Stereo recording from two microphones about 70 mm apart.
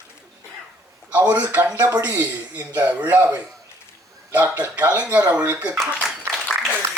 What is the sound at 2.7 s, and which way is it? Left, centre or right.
Speech, right.